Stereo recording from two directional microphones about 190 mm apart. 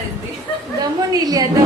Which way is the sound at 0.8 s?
20° right (ahead or behind).